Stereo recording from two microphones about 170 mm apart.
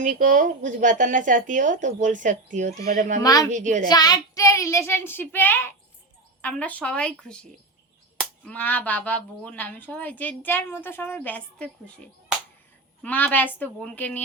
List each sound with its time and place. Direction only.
0.0 s speech: 50° right (ahead or behind)
3.2 s speech: 20° left (ahead or behind)
3.5 s speech: 45° right (ahead or behind)
3.8 s speech: 25° left (ahead or behind); by 11.7 s 5° left (ahead or behind)
13.0 s speech: 10° left (ahead or behind)